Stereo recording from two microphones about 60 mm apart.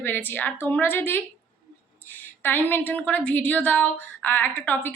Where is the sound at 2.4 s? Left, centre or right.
Left.